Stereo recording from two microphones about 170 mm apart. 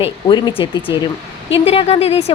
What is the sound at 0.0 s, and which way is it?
A woman's voice, 25° left (ahead or behind).